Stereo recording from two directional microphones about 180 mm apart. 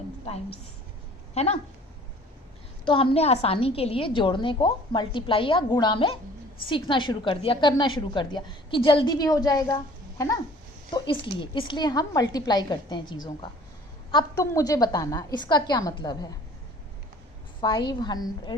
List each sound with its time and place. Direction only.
1.3 s speech: 35° left (ahead or behind)
2.8 s a woman's voice: 30° left (ahead or behind)
17.6 s a woman's voice: 25° left (ahead or behind)